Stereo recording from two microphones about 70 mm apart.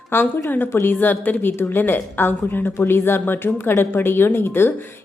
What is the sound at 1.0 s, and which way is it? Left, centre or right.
A woman's voice, left.